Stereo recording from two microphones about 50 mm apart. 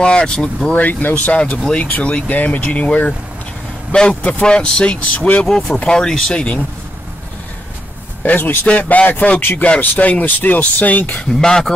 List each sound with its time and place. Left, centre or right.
0.0 s speech: centre
0.7 s speech: left
4.1 s speech: left
4.4 s speech: centre
5.8 s speech: centre
6.3 s speech: left
8.2 s a man's voice: left
11.2 s speech: centre